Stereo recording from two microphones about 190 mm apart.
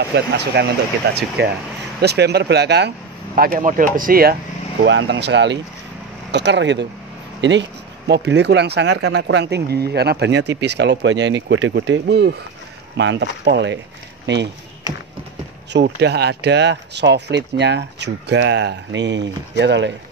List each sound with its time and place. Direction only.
0.1 s speech: 65° right (ahead or behind)
3.3 s speech: 50° right (ahead or behind)
4.8 s speech: 75° right (ahead or behind)
15.7 s speech: 60° right (ahead or behind)